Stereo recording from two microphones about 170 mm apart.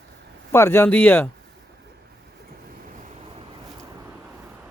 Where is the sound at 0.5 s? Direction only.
15° left (ahead or behind).